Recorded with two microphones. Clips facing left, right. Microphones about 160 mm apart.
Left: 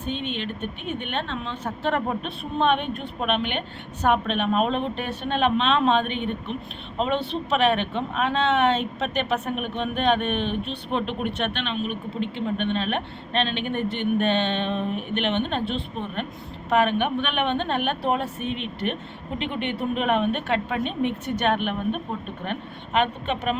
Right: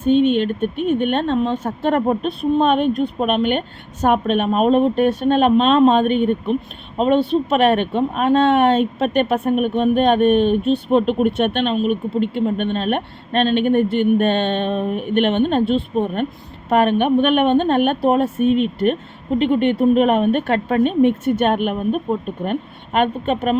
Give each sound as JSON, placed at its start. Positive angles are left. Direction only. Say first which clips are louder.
{"t": 0.0, "sound": "speech", "louder": "right 14 dB", "side_deg": -50}